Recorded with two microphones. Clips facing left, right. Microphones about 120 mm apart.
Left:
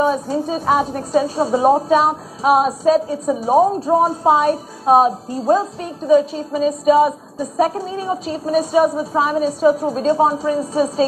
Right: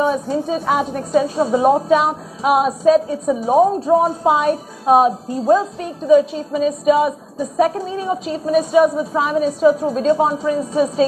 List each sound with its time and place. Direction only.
0.0 s a woman's voice: 30° left (ahead or behind)